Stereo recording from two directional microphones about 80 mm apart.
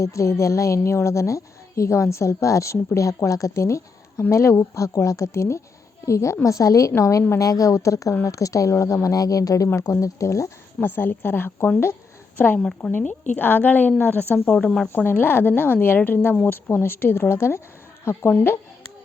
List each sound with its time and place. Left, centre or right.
0.0 s a woman's voice: left
10.8 s a woman's voice: left
12.5 s a woman's voice: centre
12.9 s a woman's voice: left
14.6 s a woman's voice: centre
14.8 s a woman's voice: left